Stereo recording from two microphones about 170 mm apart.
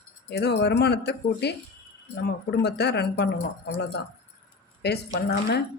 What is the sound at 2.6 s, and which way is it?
Speech, 75° left (ahead or behind).